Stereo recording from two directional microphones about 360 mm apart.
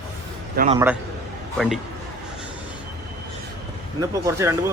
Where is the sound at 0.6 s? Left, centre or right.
Right.